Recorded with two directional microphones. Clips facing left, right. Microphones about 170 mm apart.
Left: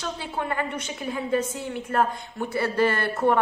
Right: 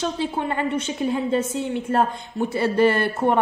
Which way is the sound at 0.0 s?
25° right (ahead or behind).